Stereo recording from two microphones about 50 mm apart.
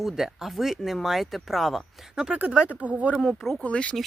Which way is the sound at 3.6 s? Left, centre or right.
Left.